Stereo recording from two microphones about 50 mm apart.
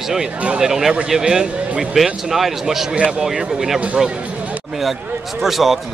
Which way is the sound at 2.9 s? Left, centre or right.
Centre.